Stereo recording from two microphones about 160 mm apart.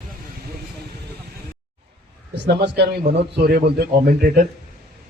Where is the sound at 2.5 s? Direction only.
90° right.